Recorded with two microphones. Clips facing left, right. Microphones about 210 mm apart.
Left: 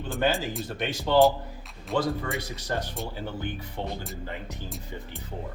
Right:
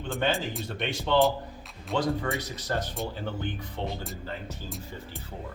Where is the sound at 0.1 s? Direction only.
Centre (ahead or behind).